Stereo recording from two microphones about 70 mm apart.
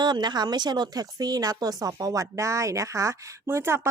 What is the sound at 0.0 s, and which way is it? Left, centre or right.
A woman's voice, right.